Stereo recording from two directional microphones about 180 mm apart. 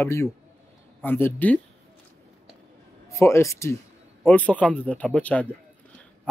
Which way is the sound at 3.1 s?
15° left (ahead or behind).